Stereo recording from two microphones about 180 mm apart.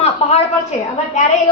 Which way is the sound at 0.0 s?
35° left (ahead or behind).